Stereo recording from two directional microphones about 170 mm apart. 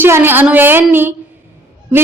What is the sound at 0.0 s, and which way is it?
A woman's voice, 10° right (ahead or behind).